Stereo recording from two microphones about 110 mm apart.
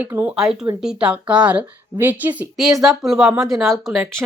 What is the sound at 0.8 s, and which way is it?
A woman's voice, 5° right (ahead or behind).